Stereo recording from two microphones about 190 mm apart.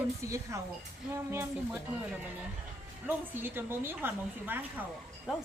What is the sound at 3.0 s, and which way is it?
A woman's voice, 10° right (ahead or behind).